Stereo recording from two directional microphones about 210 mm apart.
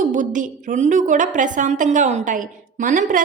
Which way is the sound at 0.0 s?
35° right (ahead or behind).